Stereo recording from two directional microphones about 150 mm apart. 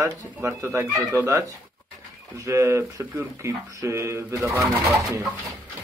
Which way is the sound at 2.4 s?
20° right (ahead or behind).